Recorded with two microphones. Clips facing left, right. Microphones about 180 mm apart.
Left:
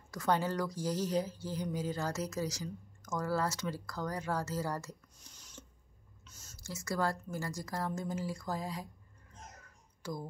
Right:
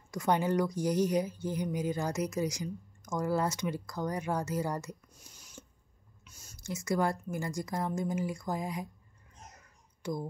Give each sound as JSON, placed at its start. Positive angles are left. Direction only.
{"t": 0.1, "sound": "a woman's voice", "side_deg": -15}